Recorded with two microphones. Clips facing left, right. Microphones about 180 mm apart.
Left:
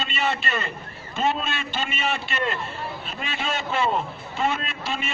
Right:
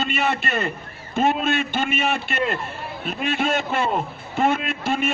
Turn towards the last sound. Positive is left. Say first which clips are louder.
# right 7 dB
turn(degrees=-55)  # may be behind; listen again after turning